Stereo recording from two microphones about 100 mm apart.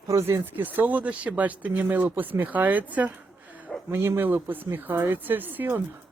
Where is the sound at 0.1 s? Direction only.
30° right (ahead or behind).